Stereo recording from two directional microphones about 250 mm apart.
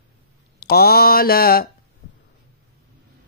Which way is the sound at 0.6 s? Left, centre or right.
Left.